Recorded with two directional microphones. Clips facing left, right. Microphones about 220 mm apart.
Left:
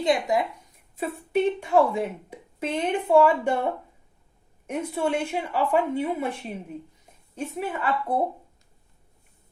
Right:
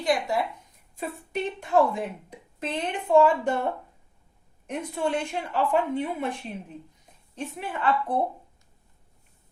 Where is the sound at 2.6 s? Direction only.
10° left (ahead or behind).